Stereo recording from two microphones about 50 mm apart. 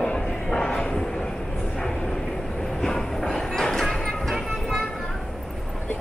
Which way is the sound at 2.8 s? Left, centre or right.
Centre.